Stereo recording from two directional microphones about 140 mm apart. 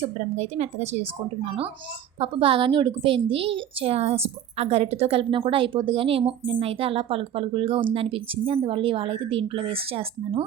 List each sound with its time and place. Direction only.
0.0 s speech: 50° right (ahead or behind)
2.1 s a child's voice: 40° right (ahead or behind)